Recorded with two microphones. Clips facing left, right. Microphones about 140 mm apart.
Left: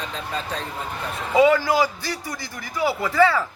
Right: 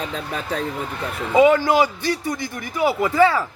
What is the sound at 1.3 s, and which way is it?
A man's voice, 20° right (ahead or behind).